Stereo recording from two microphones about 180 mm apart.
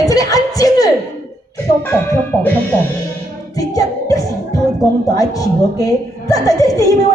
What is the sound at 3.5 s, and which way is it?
Music, 20° left (ahead or behind).